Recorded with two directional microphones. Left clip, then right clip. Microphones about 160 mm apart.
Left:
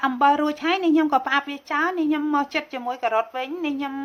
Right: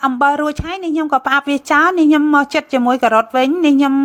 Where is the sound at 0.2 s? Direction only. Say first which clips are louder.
Right 4 dB; 45° right (ahead or behind).